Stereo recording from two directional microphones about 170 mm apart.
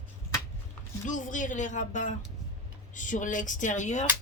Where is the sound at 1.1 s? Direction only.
50° left (ahead or behind).